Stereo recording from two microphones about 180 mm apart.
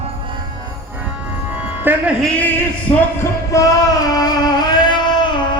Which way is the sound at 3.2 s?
15° left (ahead or behind).